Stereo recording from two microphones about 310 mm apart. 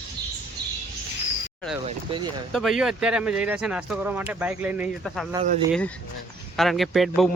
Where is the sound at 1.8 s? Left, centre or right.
Centre.